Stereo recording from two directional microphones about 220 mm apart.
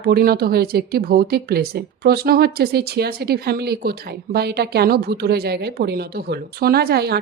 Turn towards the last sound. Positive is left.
turn(degrees=-45)  # may be behind; listen again after turning